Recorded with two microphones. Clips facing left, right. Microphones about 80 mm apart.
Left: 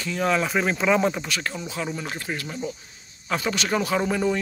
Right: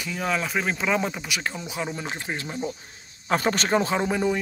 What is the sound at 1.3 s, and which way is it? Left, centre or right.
Speech, centre.